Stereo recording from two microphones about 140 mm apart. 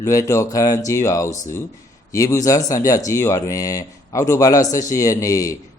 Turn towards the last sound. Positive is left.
turn(degrees=25)  # may be behind; listen again after turning